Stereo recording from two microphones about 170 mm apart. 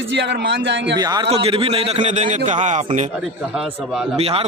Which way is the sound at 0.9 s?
25° right (ahead or behind).